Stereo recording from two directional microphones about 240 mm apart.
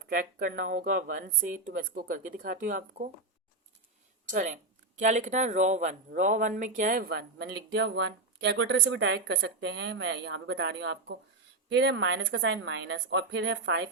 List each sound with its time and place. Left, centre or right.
0.0 s speech: right
4.3 s speech: right